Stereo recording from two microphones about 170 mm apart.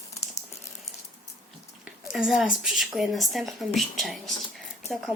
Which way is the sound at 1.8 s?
Centre (ahead or behind).